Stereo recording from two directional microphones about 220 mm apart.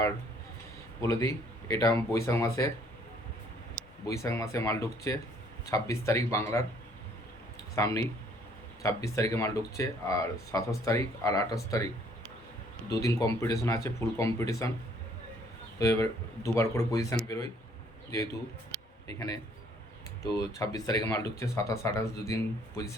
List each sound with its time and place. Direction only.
1.0 s speech: 15° left (ahead or behind)
4.0 s speech: 15° left (ahead or behind)
7.8 s speech: 15° left (ahead or behind)
13.0 s speech: 15° left (ahead or behind)
15.8 s speech: 15° left (ahead or behind)
20.2 s speech: 15° left (ahead or behind)